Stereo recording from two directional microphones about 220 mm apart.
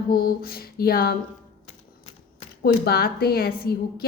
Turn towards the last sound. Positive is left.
turn(degrees=45)  # may be behind; listen again after turning